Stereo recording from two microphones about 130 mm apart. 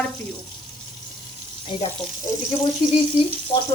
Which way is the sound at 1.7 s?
35° left (ahead or behind).